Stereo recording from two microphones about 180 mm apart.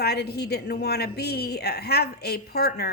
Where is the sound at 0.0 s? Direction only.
65° left (ahead or behind).